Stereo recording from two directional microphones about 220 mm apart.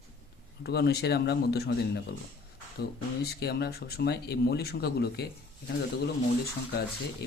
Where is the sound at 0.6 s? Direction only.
45° left (ahead or behind).